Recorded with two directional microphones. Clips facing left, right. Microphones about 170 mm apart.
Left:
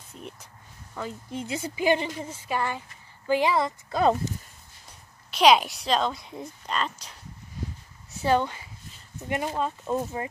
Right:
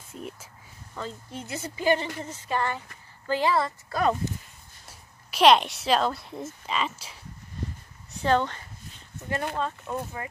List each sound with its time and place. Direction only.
0.1 s speech: 5° right (ahead or behind)
0.9 s a woman's voice: 10° left (ahead or behind)
4.8 s speech: 5° right (ahead or behind)
8.1 s a sound: 10° left (ahead or behind)
9.8 s speech: 25° left (ahead or behind)